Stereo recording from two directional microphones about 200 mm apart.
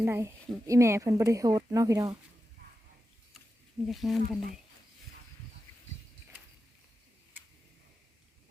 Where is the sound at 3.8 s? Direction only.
Centre (ahead or behind).